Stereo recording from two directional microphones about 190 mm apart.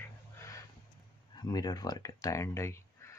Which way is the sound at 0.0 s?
15° left (ahead or behind).